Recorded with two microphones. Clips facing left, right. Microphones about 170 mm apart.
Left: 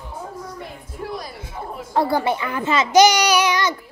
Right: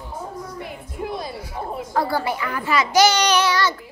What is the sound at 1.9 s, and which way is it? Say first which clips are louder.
A child's voice: left 4 dB; 25° left (ahead or behind).